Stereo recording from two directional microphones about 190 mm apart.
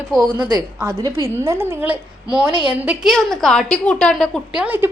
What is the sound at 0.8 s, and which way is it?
A woman's voice, 15° right (ahead or behind).